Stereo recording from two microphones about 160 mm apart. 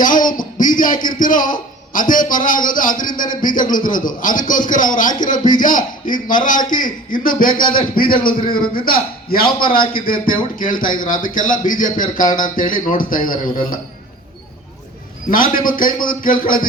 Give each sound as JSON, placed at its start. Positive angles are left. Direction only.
{"t": 0.0, "sound": "a man's voice", "side_deg": 55}
{"t": 15.3, "sound": "speech", "side_deg": 60}